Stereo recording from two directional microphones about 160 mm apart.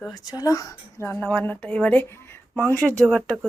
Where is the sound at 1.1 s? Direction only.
10° left (ahead or behind).